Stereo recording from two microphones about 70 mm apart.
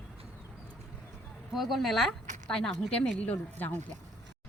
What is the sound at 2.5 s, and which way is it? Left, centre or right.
Speech, centre.